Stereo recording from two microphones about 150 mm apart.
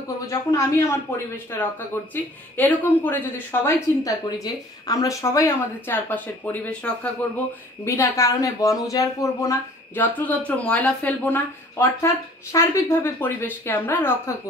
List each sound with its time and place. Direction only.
0.3 s speech: 20° left (ahead or behind)
7.8 s speech: 20° left (ahead or behind)